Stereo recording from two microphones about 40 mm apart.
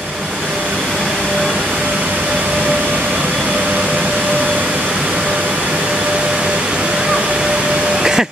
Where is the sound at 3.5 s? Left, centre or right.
Right.